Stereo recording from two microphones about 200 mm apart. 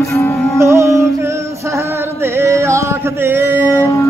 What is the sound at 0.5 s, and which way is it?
Music, 15° right (ahead or behind).